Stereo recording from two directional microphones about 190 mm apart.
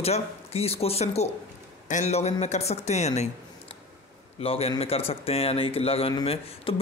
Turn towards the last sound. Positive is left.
turn(degrees=30)  # may be behind; listen again after turning